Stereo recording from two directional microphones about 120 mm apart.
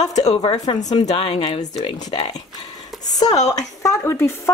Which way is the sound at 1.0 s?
55° left (ahead or behind).